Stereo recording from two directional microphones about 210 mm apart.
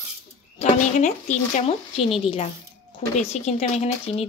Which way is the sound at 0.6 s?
35° left (ahead or behind).